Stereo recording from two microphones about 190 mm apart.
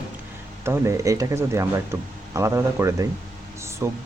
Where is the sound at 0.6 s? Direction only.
15° right (ahead or behind).